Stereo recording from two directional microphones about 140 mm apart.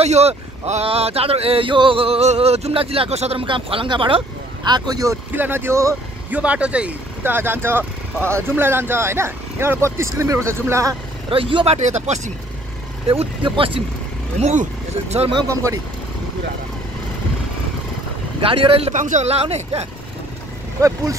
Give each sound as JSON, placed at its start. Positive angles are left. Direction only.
{"t": 0.0, "sound": "speech", "side_deg": -50}
{"t": 5.3, "sound": "speech", "side_deg": -15}
{"t": 6.3, "sound": "speech", "side_deg": -10}
{"t": 11.2, "sound": "speech", "side_deg": -40}
{"t": 13.1, "sound": "speech", "side_deg": -40}
{"t": 14.4, "sound": "speech", "side_deg": -55}
{"t": 15.4, "sound": "speech", "side_deg": -25}
{"t": 18.4, "sound": "speech", "side_deg": -40}
{"t": 18.9, "sound": "speech", "side_deg": -60}